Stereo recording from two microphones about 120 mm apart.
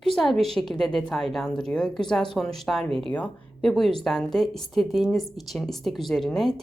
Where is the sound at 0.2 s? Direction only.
Centre (ahead or behind).